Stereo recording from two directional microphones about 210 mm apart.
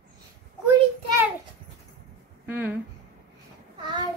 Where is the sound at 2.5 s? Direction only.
10° right (ahead or behind).